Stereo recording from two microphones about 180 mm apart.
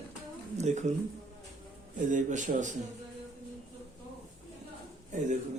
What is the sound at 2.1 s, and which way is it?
Speech, 45° right (ahead or behind).